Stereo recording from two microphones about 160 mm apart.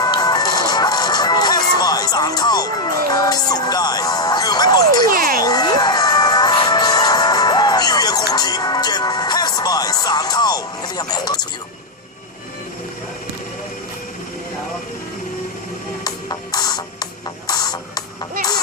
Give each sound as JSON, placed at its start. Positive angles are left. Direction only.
{"t": 0.0, "sound": "music", "side_deg": 25}
{"t": 5.0, "sound": "a sound", "side_deg": -65}
{"t": 5.4, "sound": "music", "side_deg": 25}
{"t": 16.0, "sound": "music", "side_deg": 25}